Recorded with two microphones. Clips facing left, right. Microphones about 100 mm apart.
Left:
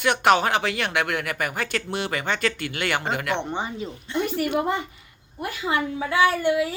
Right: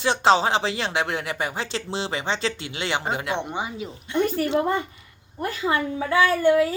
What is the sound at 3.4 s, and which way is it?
Speech, 10° right (ahead or behind).